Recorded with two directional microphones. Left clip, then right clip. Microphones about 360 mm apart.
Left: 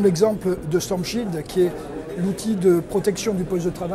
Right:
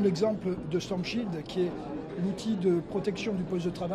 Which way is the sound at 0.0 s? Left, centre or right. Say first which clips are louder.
Left 9 dB; centre.